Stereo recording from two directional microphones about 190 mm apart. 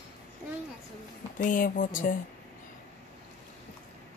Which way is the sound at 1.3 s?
45° left (ahead or behind).